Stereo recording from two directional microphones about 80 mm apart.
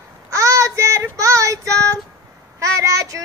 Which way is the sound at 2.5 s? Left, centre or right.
Right.